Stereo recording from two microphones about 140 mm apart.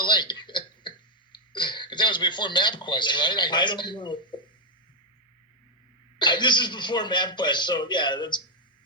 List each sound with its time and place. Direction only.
0.0 s throat clearing: 35° left (ahead or behind)
6.1 s speech: 35° left (ahead or behind)